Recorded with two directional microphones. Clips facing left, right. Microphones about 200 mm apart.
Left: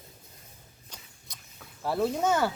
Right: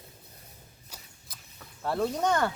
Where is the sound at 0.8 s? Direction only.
5° right (ahead or behind).